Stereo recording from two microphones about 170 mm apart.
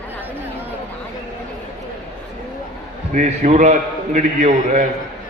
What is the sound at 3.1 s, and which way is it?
A man's voice, 45° right (ahead or behind).